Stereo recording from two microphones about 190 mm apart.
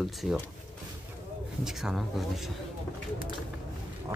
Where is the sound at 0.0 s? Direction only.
Centre (ahead or behind).